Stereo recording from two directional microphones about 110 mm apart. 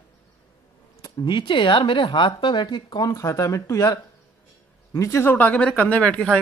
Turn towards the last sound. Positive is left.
turn(degrees=10)  # may be behind; listen again after turning